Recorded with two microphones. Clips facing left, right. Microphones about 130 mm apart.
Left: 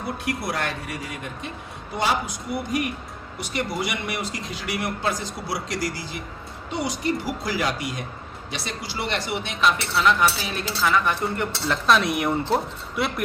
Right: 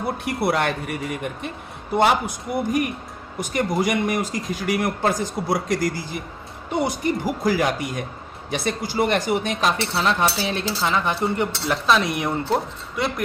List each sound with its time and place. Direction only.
0.3 s speech: 60° right (ahead or behind)
2.0 s speech: 55° right (ahead or behind); by 11.8 s 15° right (ahead or behind)
11.9 s speech: centre (ahead or behind)